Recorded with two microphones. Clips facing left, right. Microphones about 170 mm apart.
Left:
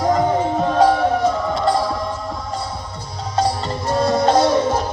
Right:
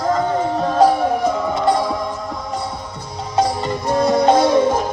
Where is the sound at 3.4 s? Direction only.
15° right (ahead or behind).